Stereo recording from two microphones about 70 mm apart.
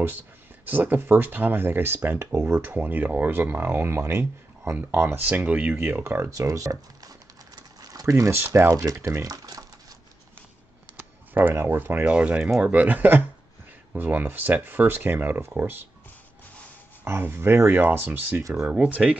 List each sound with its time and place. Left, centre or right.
0.7 s speech: right
5.8 s speech: right
8.6 s speech: right
11.0 s a sound: right
12.0 s speech: centre; by 15.8 s right
17.0 s speech: right
18.7 s speech: centre